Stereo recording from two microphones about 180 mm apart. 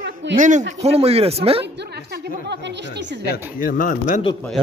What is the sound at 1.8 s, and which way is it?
A woman's voice, 65° right (ahead or behind).